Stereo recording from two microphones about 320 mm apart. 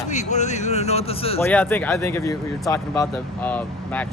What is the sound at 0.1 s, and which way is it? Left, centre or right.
Speech, left.